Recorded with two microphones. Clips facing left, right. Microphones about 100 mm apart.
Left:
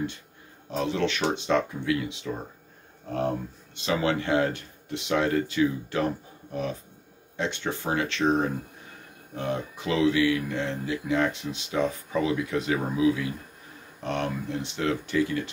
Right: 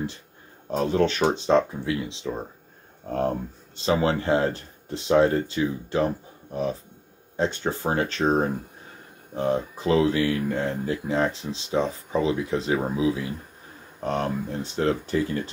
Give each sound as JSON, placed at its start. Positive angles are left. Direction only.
{"t": 0.7, "sound": "speech", "side_deg": -45}
{"t": 3.7, "sound": "speech", "side_deg": -35}
{"t": 14.0, "sound": "speech", "side_deg": -35}